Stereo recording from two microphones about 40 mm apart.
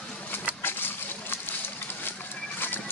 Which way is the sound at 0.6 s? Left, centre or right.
Left.